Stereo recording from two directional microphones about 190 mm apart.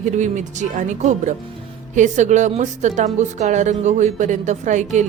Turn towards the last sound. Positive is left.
turn(degrees=-40)  # may be behind; listen again after turning